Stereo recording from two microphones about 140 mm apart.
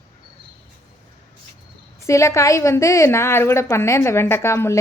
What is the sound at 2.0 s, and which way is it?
A woman's voice, 20° left (ahead or behind).